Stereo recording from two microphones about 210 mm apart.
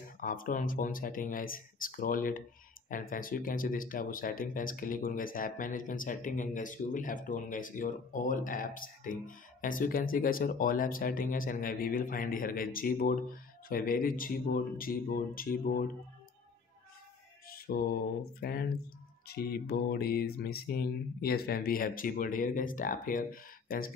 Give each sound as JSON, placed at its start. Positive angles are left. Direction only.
{"t": 0.2, "sound": "speech", "side_deg": 40}
{"t": 17.5, "sound": "music", "side_deg": 45}
{"t": 18.4, "sound": "speech", "side_deg": 45}